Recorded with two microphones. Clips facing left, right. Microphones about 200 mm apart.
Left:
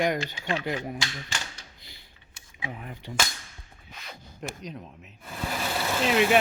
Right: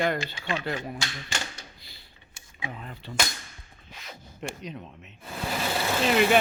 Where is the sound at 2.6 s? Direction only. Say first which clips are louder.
Left 1 dB; 15° left (ahead or behind).